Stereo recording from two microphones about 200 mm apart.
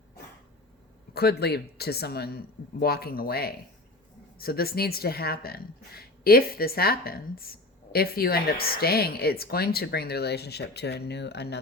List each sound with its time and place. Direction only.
1.1 s a woman's voice: 50° left (ahead or behind)